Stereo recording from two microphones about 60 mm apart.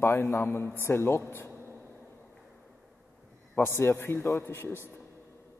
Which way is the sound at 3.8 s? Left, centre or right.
Left.